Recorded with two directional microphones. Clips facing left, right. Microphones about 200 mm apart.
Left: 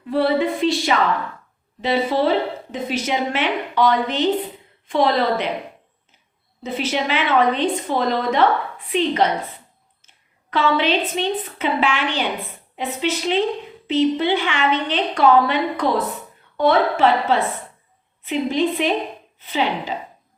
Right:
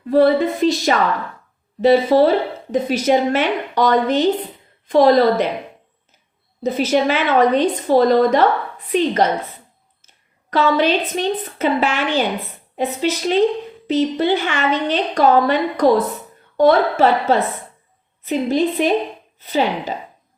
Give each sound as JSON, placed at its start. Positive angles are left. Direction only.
{"t": 0.1, "sound": "a woman's voice", "side_deg": -40}
{"t": 6.6, "sound": "a woman's voice", "side_deg": -45}
{"t": 10.5, "sound": "a woman's voice", "side_deg": -40}